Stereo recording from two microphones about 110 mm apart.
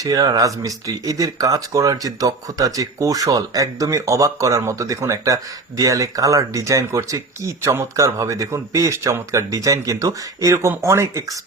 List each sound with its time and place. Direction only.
0.0 s speech: 35° right (ahead or behind)